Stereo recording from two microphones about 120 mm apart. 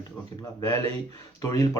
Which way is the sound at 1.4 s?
30° left (ahead or behind).